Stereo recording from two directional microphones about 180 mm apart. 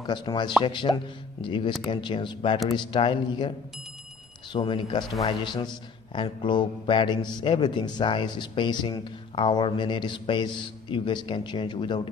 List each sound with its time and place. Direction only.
0.0 s a man's voice: 25° left (ahead or behind)